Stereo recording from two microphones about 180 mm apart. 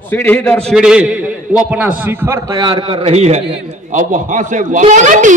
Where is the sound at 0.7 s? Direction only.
5° right (ahead or behind).